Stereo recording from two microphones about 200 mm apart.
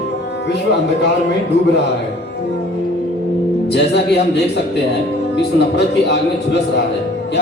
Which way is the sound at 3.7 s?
55° left (ahead or behind).